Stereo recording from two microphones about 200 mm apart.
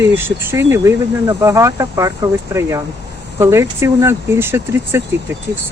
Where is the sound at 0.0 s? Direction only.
10° right (ahead or behind).